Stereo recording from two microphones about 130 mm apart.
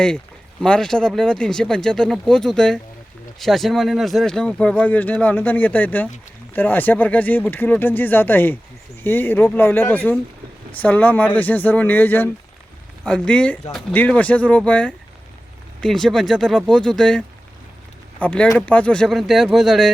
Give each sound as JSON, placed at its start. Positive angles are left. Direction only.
{"t": 0.6, "sound": "speech", "side_deg": 5}